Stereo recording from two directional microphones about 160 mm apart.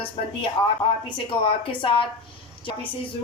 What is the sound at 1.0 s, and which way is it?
A woman's voice, 30° left (ahead or behind).